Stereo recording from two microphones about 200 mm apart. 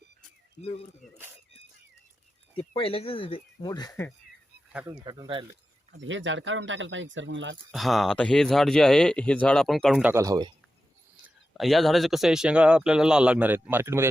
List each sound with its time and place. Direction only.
0.6 s speech: 30° left (ahead or behind)
2.7 s speech: 30° left (ahead or behind)
4.7 s speech: 5° right (ahead or behind)
5.0 s speech: 20° right (ahead or behind)
5.9 s speech: 70° right (ahead or behind)
7.7 s speech: centre (ahead or behind); by 10.5 s 20° right (ahead or behind)
11.2 s speech: centre (ahead or behind)